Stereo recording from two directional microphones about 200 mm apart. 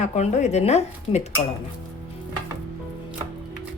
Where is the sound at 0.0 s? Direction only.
35° left (ahead or behind).